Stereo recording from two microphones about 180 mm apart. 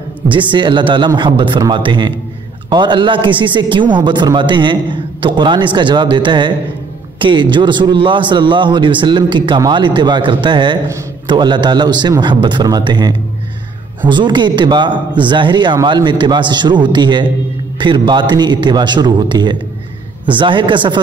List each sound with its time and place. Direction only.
0.3 s a man's voice: 25° right (ahead or behind)